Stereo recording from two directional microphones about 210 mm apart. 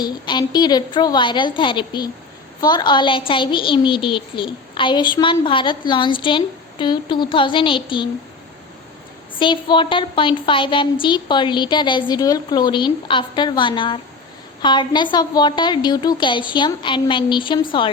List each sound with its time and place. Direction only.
0.0 s a woman's voice: 20° left (ahead or behind)
9.4 s a woman's voice: 25° left (ahead or behind)